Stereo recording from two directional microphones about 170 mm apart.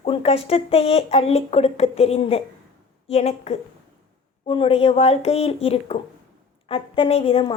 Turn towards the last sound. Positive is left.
turn(degrees=35)  # may be behind; listen again after turning